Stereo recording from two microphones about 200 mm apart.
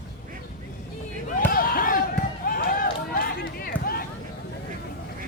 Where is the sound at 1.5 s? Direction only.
45° left (ahead or behind).